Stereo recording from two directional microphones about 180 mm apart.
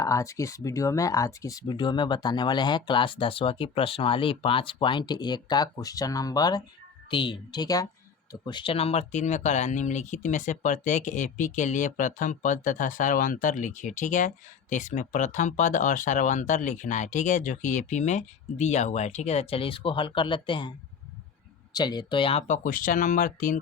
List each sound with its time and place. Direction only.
0.0 s speech: 15° left (ahead or behind); by 23.6 s 50° left (ahead or behind)